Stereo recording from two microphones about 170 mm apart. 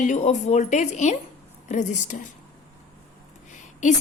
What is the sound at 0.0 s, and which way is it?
A woman's voice, 45° left (ahead or behind).